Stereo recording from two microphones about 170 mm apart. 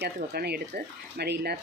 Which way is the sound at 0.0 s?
65° right (ahead or behind).